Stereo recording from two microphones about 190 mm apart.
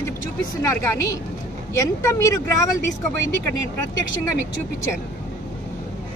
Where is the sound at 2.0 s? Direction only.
15° left (ahead or behind).